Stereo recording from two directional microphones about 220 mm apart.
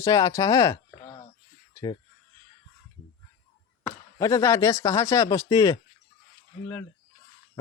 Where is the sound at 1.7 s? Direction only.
20° left (ahead or behind).